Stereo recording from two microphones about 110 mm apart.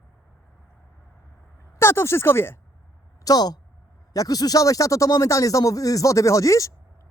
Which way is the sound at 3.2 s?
35° left (ahead or behind).